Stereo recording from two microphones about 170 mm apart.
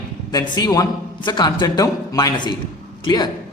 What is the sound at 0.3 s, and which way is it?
A man's voice, 25° left (ahead or behind).